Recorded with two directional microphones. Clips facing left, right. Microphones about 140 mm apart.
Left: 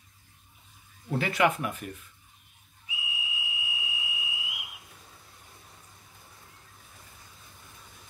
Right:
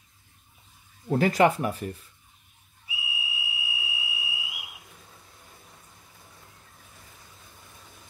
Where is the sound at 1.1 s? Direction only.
40° right (ahead or behind).